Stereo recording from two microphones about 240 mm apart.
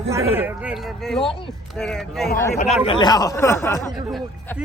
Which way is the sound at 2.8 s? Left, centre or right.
Left.